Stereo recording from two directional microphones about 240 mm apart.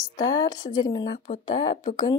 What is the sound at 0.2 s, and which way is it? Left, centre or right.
Speech, centre.